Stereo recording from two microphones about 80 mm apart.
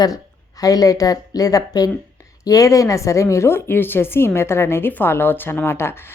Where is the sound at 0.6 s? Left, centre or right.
Left.